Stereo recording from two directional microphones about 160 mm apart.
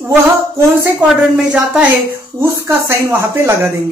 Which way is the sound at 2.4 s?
15° right (ahead or behind).